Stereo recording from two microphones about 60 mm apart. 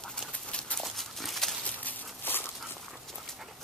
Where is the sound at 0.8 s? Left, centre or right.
Centre.